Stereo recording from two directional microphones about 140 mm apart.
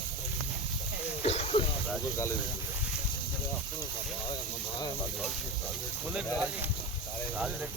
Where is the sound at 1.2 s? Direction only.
50° left (ahead or behind).